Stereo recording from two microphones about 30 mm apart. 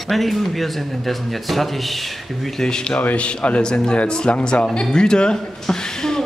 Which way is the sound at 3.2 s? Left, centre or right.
Left.